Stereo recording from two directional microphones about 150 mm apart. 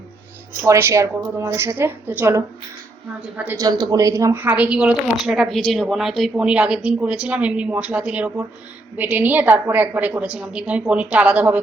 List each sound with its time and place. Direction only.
0.6 s speech: 15° right (ahead or behind)
3.6 s speech: 25° right (ahead or behind); by 11.6 s 10° right (ahead or behind)